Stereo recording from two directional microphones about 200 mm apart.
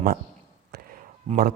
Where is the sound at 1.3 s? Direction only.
50° right (ahead or behind).